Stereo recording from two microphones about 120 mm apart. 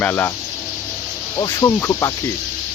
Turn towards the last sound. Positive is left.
turn(degrees=25)  # may be behind; listen again after turning